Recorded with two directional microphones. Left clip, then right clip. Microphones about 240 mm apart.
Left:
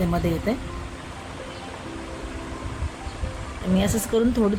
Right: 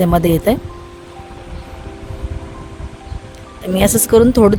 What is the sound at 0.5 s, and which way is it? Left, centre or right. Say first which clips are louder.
Speech: right 12 dB; right.